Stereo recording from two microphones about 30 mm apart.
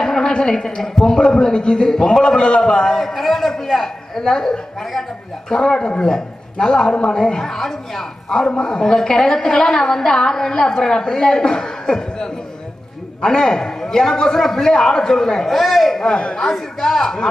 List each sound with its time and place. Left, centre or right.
0.0 s a sound: centre
0.3 s a woman's voice: left
2.9 s a man's voice: centre
15.5 s a man's voice: centre
16.0 s speech: left
16.3 s a man's voice: centre